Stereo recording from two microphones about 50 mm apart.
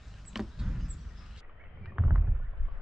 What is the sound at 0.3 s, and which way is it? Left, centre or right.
Vehicle, centre.